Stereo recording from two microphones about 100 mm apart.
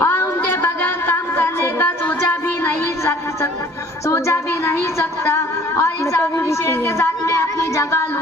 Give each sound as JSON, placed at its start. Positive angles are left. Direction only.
{"t": 0.0, "sound": "music", "side_deg": 20}
{"t": 4.1, "sound": "a sound", "side_deg": 25}
{"t": 6.7, "sound": "speech", "side_deg": 25}